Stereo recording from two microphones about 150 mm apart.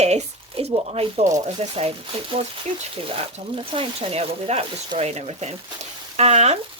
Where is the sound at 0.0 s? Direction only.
45° right (ahead or behind).